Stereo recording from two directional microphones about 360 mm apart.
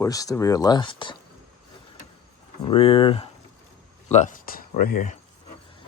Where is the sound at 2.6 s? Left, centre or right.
Centre.